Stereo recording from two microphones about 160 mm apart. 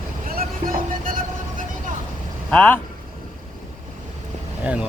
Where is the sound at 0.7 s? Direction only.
60° right (ahead or behind).